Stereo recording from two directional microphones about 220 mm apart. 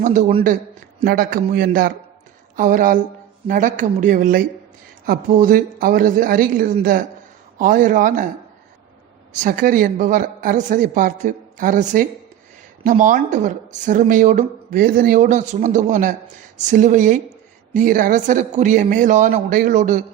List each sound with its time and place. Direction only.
0.0 s speech: 35° right (ahead or behind)
1.0 s speech: 40° right (ahead or behind)
9.3 s speech: 35° right (ahead or behind)